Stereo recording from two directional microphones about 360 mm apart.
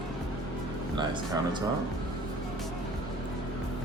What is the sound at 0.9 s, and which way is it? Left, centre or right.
Speech, centre.